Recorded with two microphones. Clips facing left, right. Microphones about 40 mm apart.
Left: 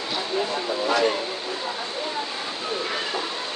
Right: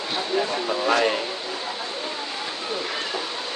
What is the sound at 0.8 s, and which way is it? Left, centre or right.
Speech, right.